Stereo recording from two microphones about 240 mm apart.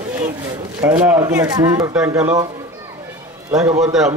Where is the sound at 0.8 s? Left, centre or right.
Centre.